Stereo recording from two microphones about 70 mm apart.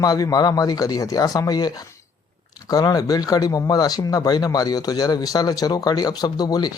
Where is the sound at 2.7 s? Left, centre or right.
Left.